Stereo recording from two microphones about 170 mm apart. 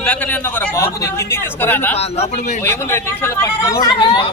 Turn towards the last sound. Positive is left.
turn(degrees=25)  # may be behind; listen again after turning